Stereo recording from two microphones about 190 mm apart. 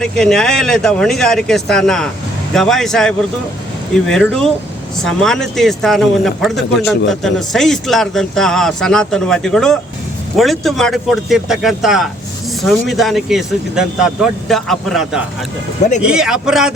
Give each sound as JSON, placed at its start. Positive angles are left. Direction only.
{"t": 0.0, "sound": "a man's voice", "side_deg": 5}